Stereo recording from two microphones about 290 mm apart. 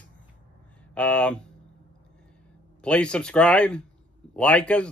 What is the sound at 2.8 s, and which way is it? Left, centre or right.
Speech, centre.